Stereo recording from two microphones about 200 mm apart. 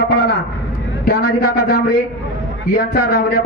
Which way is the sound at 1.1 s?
50° left (ahead or behind).